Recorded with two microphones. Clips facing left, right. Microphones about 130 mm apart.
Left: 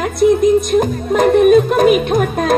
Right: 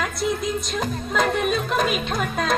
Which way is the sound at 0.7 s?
50° left (ahead or behind).